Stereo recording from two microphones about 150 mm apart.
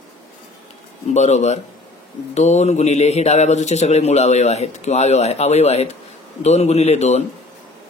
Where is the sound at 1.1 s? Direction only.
50° left (ahead or behind).